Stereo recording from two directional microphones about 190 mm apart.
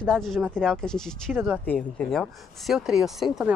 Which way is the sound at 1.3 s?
10° right (ahead or behind).